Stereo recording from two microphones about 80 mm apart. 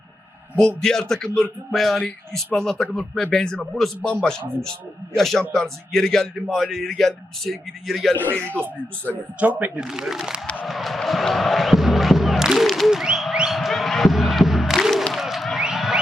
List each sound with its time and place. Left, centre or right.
0.8 s a man's voice: centre
8.1 s speech: left
9.4 s speech: centre
9.8 s speech: centre
10.4 s a man's voice: centre
10.7 s crowd: centre
15.6 s a sound: centre